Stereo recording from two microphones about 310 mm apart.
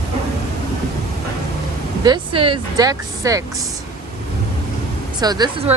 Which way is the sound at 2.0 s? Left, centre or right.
Centre.